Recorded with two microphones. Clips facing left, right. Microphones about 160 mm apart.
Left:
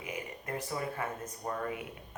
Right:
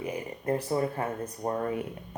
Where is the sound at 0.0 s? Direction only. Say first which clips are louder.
Right 8 dB; 35° right (ahead or behind).